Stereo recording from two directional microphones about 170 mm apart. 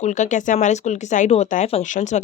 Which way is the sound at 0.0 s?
45° left (ahead or behind).